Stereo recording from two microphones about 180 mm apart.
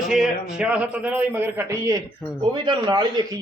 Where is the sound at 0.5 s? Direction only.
5° right (ahead or behind).